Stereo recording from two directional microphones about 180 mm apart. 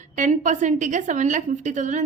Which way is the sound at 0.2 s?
45° right (ahead or behind).